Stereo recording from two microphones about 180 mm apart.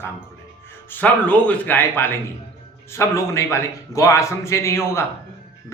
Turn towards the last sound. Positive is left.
turn(degrees=15)  # may be behind; listen again after turning